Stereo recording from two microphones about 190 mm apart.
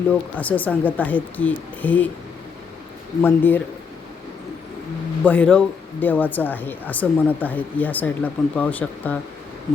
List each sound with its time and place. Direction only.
0.1 s speech: 10° left (ahead or behind)
3.2 s speech: 10° left (ahead or behind)
5.2 s speech: 5° left (ahead or behind)